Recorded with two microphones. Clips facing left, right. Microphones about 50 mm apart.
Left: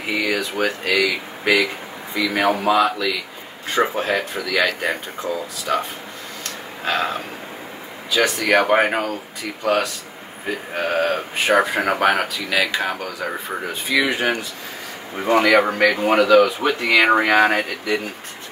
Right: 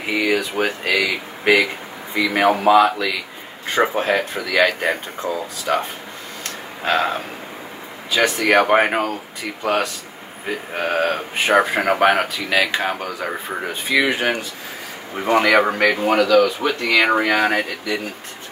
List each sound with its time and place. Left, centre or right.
0.2 s speech: centre
2.6 s speech: right
6.8 s speech: right
8.5 s a man's voice: centre
9.6 s speech: right
13.9 s speech: right
15.1 s a man's voice: centre
16.0 s speech: centre